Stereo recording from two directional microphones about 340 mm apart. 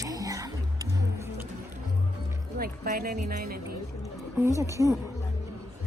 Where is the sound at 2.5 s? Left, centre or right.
Right.